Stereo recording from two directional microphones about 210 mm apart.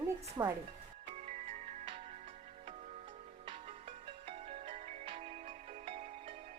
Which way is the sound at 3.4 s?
25° right (ahead or behind).